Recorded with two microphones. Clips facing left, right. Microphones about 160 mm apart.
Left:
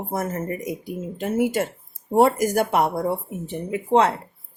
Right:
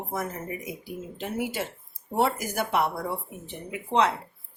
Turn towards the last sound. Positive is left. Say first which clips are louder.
# left 6 dB
turn(degrees=50)  # may be behind; listen again after turning